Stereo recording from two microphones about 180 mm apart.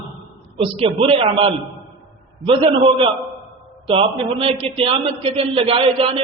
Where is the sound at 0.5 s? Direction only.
30° right (ahead or behind).